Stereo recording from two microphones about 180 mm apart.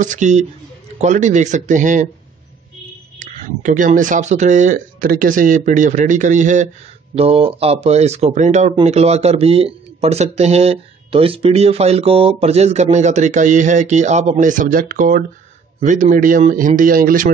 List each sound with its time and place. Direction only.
0.0 s speech: 45° right (ahead or behind)
3.2 s speech: 45° right (ahead or behind)